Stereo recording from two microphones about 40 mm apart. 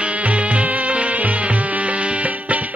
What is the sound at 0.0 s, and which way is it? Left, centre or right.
Music, right.